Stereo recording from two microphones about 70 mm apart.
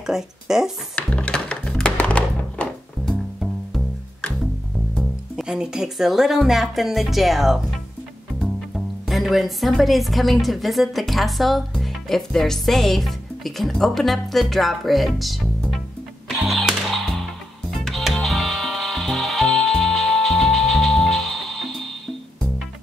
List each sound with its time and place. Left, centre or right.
0.0 s speech: centre
0.9 s music: centre
3.1 s music: centre
5.3 s speech: centre
16.3 s music: centre